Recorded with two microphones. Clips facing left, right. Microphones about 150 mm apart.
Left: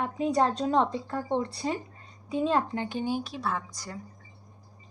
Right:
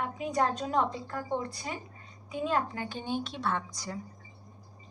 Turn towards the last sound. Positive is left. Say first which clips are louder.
# even
turn(degrees=0)  # may be behind; listen again after turning